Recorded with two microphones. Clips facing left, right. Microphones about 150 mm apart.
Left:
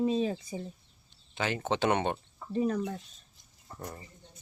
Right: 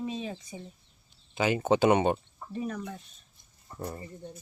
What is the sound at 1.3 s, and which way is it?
Speech, 10° right (ahead or behind).